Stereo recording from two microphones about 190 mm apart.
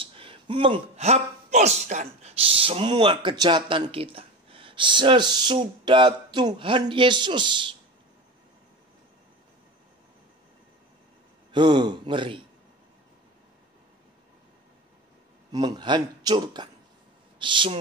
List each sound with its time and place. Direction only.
0.0 s speech: 30° right (ahead or behind)
11.5 s speech: 25° right (ahead or behind)
15.5 s speech: 20° right (ahead or behind)